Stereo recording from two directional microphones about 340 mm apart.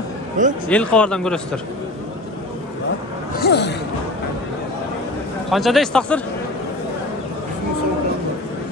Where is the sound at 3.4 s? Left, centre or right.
Left.